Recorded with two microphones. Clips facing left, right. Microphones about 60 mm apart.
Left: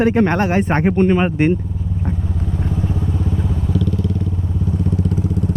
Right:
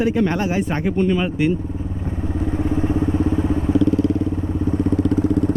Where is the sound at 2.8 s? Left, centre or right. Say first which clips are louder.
Right 4 dB; right.